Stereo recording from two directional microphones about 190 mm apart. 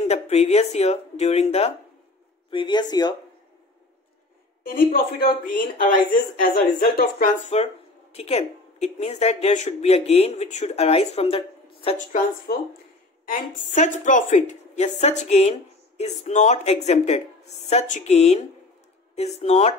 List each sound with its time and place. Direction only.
0.1 s speech: 35° left (ahead or behind)
5.5 s speech: 45° left (ahead or behind)